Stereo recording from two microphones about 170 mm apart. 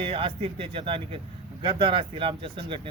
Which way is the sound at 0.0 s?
30° right (ahead or behind).